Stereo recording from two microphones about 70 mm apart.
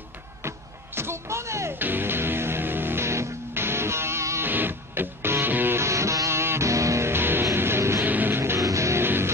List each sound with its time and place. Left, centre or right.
0.4 s music: right
1.8 s music: right
4.5 s music: right
5.8 s music: right
7.1 s music: right
8.0 s music: right
8.5 s music: right
9.0 s music: right